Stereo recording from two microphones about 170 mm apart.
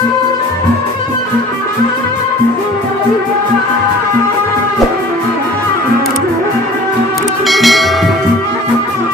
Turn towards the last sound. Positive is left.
turn(degrees=0)  # may be behind; listen again after turning